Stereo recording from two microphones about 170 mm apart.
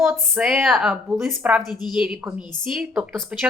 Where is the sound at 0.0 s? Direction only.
5° right (ahead or behind).